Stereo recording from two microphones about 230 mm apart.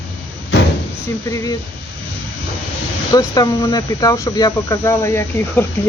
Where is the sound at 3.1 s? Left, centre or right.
Centre.